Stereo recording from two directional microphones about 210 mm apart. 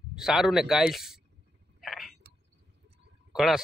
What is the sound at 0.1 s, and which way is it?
Speech, centre (ahead or behind).